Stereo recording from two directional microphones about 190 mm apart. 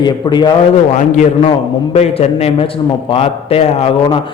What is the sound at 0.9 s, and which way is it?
A man's voice, 40° left (ahead or behind).